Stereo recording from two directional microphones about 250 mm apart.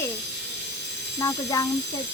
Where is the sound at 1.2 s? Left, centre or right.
Centre.